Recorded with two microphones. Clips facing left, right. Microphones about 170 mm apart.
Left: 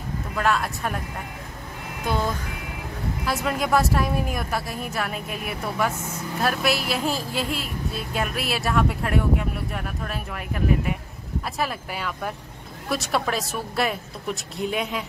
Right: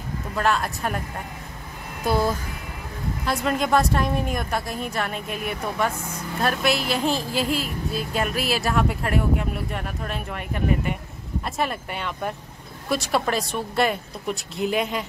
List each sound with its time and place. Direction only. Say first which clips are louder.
0.4 s a woman's voice: right 1 dB; centre (ahead or behind)
2.0 s speech: right 3 dB; 10° right (ahead or behind)
3.3 s a woman's voice: right 2 dB; 5° left (ahead or behind)